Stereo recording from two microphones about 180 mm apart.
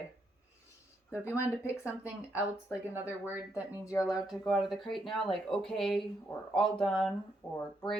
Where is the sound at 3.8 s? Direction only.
15° left (ahead or behind).